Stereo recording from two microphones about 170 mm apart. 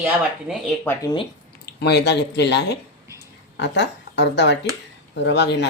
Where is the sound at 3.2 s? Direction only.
90° left.